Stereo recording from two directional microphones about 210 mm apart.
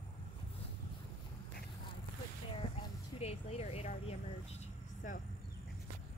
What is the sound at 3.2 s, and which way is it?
Vehicle, 30° left (ahead or behind).